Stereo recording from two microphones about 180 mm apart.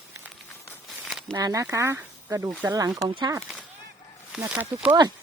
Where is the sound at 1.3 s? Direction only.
20° right (ahead or behind).